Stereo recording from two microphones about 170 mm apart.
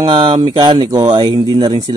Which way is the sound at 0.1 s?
30° right (ahead or behind).